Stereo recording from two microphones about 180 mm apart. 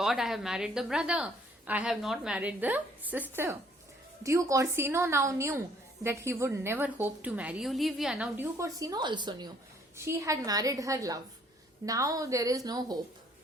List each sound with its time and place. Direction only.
0.0 s a woman's voice: centre (ahead or behind)
8.5 s a woman's voice: 20° right (ahead or behind)